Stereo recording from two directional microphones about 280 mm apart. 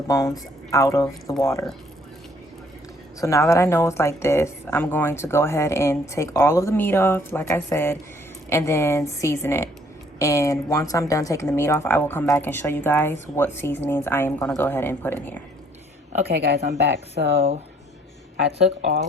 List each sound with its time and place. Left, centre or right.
0.1 s a woman's voice: centre
3.2 s a woman's voice: centre
16.7 s speech: right
17.3 s speech: right